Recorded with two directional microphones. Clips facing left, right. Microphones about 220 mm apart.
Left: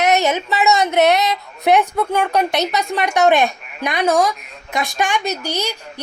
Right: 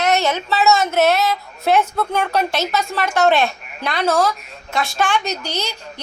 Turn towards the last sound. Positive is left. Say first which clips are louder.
# left 3 dB
turn(degrees=10)  # may be behind; listen again after turning